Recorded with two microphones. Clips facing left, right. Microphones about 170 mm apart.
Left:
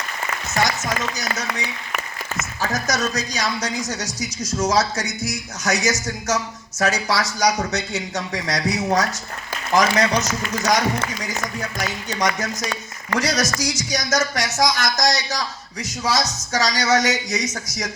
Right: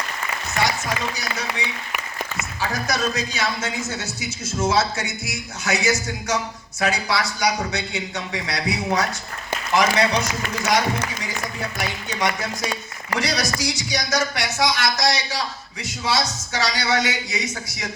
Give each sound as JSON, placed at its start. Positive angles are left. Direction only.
{"t": 1.1, "sound": "speech", "side_deg": 45}